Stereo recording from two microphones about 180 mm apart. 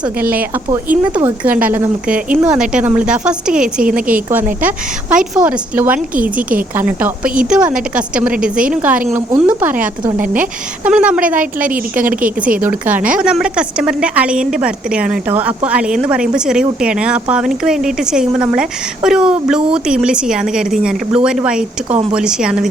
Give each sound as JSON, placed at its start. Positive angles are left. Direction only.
{"t": 0.2, "sound": "a woman's voice", "side_deg": -10}
{"t": 3.8, "sound": "a woman's voice", "side_deg": -50}
{"t": 4.6, "sound": "a woman's voice", "side_deg": -5}
{"t": 12.6, "sound": "a woman's voice", "side_deg": -10}